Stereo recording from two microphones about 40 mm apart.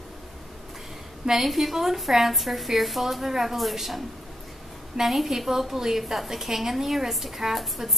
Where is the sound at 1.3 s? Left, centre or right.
Centre.